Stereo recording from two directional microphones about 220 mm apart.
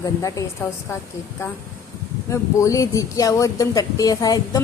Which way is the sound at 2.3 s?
15° left (ahead or behind).